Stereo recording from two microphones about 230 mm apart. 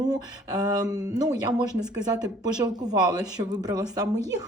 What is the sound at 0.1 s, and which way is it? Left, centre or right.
Speech, centre.